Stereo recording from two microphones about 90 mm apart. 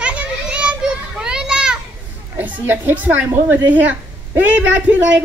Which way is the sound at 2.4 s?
20° right (ahead or behind).